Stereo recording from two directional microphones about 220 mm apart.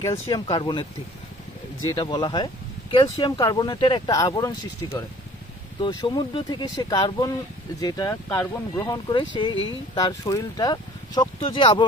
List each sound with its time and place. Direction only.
0.0 s speech: 20° left (ahead or behind)
1.9 s speech: 20° left (ahead or behind)